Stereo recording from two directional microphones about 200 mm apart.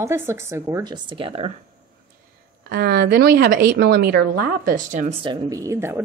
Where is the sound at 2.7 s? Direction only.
50° right (ahead or behind).